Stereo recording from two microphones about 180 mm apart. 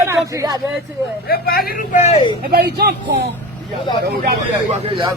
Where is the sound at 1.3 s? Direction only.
55° left (ahead or behind).